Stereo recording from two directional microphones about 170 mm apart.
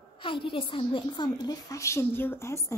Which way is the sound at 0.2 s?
30° left (ahead or behind).